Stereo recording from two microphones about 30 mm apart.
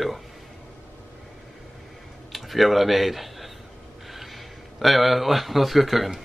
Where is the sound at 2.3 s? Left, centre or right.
Centre.